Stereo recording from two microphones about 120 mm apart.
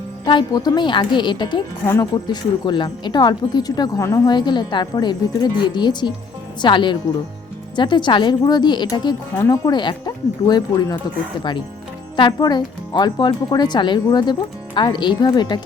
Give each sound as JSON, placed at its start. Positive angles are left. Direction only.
{"t": 0.3, "sound": "speech", "side_deg": 40}
{"t": 4.3, "sound": "speech", "side_deg": 35}
{"t": 12.1, "sound": "speech", "side_deg": 40}